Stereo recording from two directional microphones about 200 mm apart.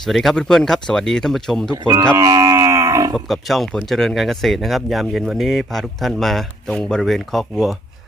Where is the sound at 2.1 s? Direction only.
15° right (ahead or behind).